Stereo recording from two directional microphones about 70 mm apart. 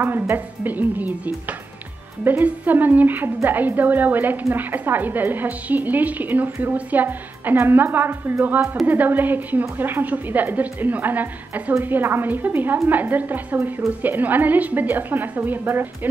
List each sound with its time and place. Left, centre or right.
0.0 s a woman's voice: right
2.4 s a woman's voice: right